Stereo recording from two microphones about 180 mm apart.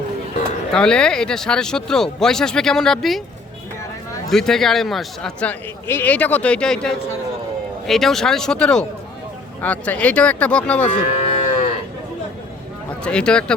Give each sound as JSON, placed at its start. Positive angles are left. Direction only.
{"t": 0.7, "sound": "speech", "side_deg": 5}
{"t": 4.3, "sound": "speech", "side_deg": 0}
{"t": 10.8, "sound": "speech", "side_deg": 40}
{"t": 13.1, "sound": "speech", "side_deg": 5}